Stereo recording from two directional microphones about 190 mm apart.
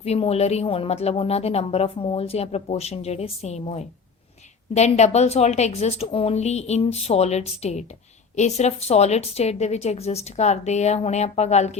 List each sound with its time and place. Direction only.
0.0 s speech: 35° left (ahead or behind)